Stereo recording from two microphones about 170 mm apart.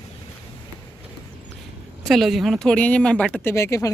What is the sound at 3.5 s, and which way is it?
Speech, 15° left (ahead or behind).